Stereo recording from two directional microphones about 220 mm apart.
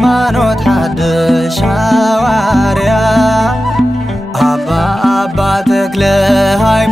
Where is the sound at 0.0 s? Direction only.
Centre (ahead or behind).